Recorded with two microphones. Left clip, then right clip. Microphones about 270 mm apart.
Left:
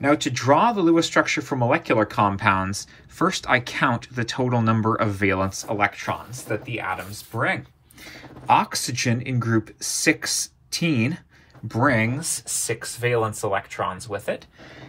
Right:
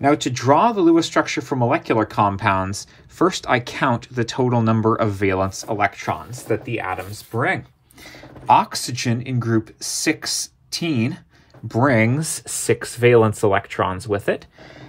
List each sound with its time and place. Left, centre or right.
0.0 s speech: right
8.5 s speech: centre; by 14.4 s right